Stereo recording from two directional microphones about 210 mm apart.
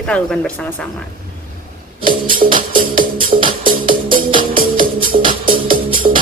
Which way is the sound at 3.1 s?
25° right (ahead or behind).